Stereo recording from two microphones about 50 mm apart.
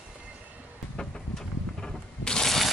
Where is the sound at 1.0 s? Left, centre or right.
Centre.